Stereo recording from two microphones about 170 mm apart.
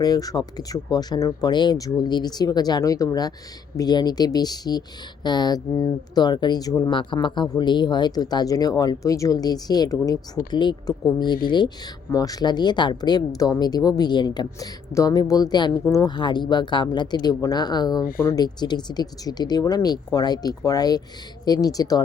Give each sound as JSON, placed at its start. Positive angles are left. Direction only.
{"t": 0.0, "sound": "a woman's voice", "side_deg": 20}